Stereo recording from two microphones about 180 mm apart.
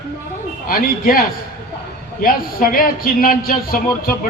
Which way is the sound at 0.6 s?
55° left (ahead or behind).